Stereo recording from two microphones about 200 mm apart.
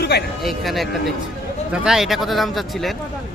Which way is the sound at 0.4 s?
Centre (ahead or behind).